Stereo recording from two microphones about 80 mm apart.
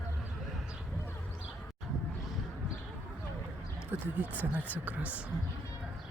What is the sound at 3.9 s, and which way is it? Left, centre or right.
Speech, right.